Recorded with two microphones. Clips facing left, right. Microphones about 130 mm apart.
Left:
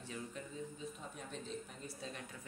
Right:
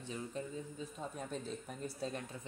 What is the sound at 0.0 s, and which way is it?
Speech, 20° right (ahead or behind).